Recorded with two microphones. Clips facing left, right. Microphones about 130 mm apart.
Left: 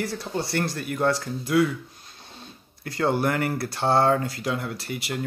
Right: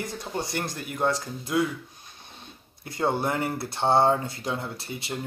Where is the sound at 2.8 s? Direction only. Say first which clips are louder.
Left 3 dB; 20° right (ahead or behind).